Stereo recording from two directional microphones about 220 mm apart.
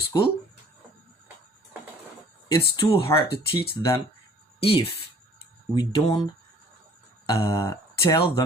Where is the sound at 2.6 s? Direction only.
15° left (ahead or behind).